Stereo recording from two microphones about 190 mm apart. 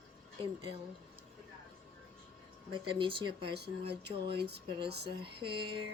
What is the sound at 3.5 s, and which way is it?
Speech, 60° right (ahead or behind).